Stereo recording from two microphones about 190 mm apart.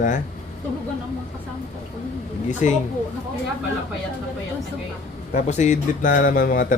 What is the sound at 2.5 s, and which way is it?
Speech, 40° left (ahead or behind).